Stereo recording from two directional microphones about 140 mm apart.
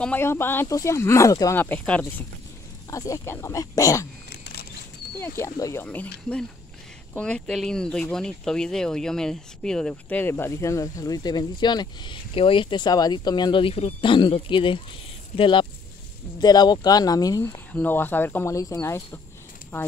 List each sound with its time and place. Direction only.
0.0 s speech: 15° left (ahead or behind)
1.6 s speech: 10° left (ahead or behind)
2.9 s speech: 20° left (ahead or behind)
5.2 s speech: 20° left (ahead or behind)
7.2 s speech: 5° left (ahead or behind); by 17.6 s 25° left (ahead or behind)
17.7 s speech: 15° left (ahead or behind)